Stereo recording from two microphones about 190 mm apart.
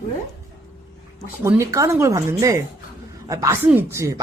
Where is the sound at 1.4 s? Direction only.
15° right (ahead or behind).